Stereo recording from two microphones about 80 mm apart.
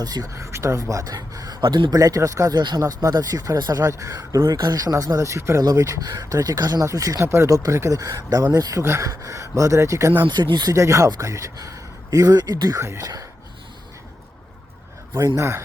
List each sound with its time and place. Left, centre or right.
0.0 s speech: right
0.3 s speech: right
1.6 s a man's voice: right
1.9 s speech: right
2.6 s speech: right
2.8 s speech: right
8.8 s speech: right
10.2 s speech: right
10.7 s speech: right
12.7 s speech: right
15.4 s speech: right